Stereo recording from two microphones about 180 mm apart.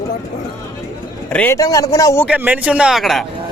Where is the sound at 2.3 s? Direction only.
10° right (ahead or behind).